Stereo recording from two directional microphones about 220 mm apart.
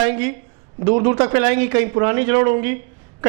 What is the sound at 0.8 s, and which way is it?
A man's voice, 30° right (ahead or behind).